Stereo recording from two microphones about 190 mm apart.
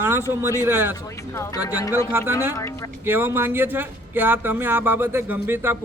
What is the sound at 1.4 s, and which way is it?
Speech, 20° left (ahead or behind).